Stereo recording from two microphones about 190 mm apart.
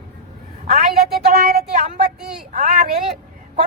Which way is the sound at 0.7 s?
50° right (ahead or behind).